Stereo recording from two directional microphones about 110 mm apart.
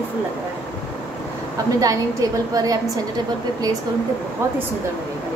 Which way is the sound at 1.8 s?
30° right (ahead or behind).